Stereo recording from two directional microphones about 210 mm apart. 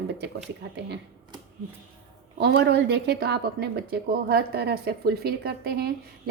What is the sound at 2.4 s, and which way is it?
A woman's voice, 50° right (ahead or behind).